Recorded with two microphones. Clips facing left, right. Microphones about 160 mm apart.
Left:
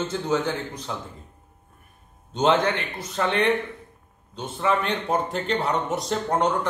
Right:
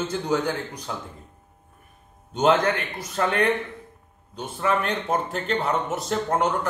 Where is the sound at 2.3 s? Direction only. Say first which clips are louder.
Right 1 dB; 5° right (ahead or behind).